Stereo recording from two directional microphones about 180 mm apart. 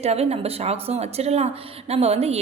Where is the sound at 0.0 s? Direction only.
35° right (ahead or behind).